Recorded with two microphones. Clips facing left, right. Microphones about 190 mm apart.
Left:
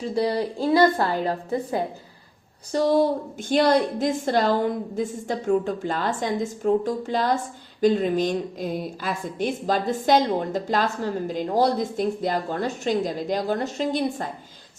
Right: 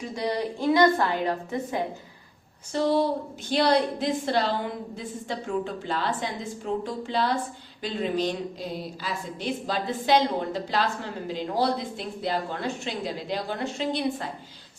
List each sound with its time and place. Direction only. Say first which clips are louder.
0.0 s a woman's voice: left 5 dB; 30° left (ahead or behind)